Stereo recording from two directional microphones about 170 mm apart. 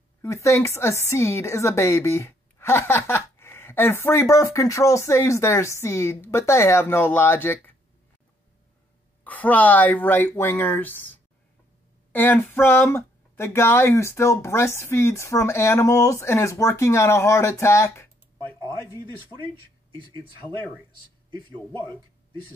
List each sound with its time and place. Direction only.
0.2 s speech: 15° left (ahead or behind)
9.2 s speech: 10° left (ahead or behind)
12.1 s speech: 10° left (ahead or behind)
19.9 s speech: 30° right (ahead or behind)
21.5 s speech: 10° left (ahead or behind)